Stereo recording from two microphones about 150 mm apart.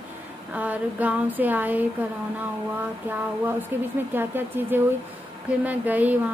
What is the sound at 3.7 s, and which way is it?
A woman's voice, 15° right (ahead or behind).